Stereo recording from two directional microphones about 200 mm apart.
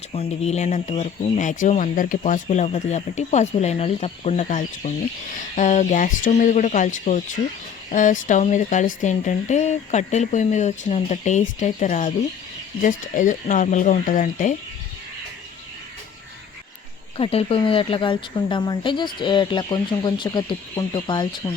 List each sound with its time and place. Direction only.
0.1 s speech: 30° left (ahead or behind)
17.2 s speech: 30° left (ahead or behind)